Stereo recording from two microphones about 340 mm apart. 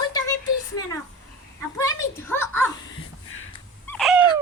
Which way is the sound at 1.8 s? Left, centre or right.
Centre.